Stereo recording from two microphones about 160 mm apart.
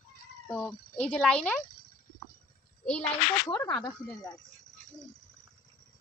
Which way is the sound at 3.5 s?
25° left (ahead or behind).